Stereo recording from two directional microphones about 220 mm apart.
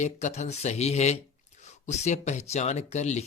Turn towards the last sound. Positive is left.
turn(degrees=30)  # may be behind; listen again after turning